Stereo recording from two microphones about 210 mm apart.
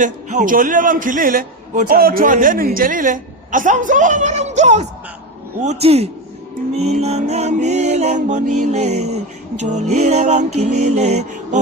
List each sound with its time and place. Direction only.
0.0 s a man's voice: 35° right (ahead or behind)